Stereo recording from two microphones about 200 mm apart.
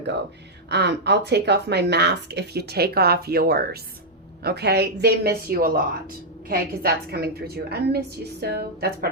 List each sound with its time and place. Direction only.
0.7 s a woman's voice: 60° right (ahead or behind)